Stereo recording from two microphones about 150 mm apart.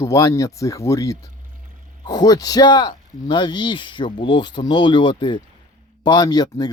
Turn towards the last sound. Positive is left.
turn(degrees=25)  # may be behind; listen again after turning